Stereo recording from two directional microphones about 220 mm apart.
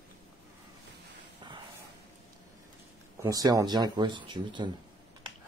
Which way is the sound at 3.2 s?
15° right (ahead or behind).